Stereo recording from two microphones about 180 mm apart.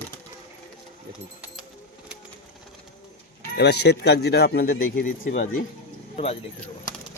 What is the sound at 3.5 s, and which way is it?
Speech, 70° left (ahead or behind).